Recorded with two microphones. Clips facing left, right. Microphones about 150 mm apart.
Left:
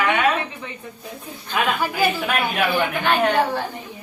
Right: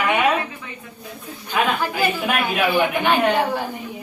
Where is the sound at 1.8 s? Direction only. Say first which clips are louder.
Even; 10° left (ahead or behind).